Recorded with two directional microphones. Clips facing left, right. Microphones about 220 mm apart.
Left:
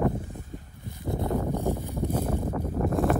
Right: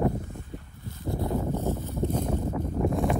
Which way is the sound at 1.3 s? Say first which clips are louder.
Left 1 dB; 15° left (ahead or behind).